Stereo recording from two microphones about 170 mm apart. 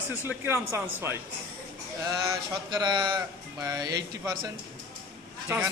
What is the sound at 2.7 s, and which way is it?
A man's voice, 25° right (ahead or behind).